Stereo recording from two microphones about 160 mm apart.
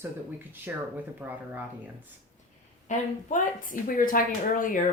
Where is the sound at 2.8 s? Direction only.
55° left (ahead or behind).